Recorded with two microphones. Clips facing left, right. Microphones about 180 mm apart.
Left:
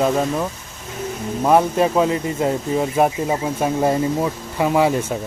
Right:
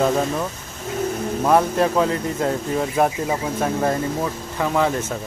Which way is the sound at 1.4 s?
5° left (ahead or behind).